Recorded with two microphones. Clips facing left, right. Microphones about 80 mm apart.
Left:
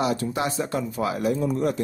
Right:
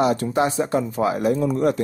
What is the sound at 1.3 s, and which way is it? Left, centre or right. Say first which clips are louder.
Speech: right 3 dB; right.